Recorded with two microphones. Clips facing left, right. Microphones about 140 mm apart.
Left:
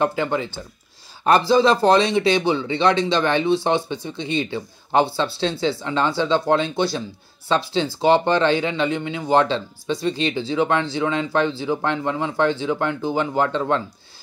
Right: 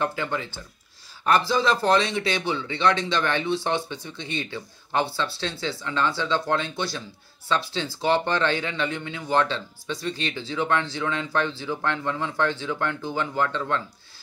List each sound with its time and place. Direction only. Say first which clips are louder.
0.0 s speech: left 6 dB; 20° left (ahead or behind)